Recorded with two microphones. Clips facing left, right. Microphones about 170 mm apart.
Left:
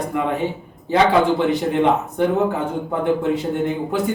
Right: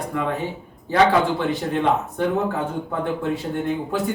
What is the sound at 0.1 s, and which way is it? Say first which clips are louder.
Speech: left 2 dB; 20° left (ahead or behind).